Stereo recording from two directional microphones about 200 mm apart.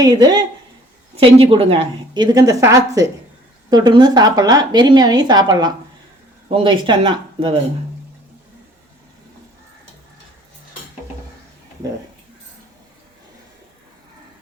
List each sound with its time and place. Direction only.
0.0 s a woman's voice: 20° right (ahead or behind)